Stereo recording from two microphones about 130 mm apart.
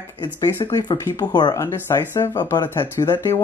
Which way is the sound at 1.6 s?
20° left (ahead or behind).